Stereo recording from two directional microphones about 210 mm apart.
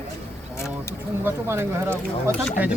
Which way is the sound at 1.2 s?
10° right (ahead or behind).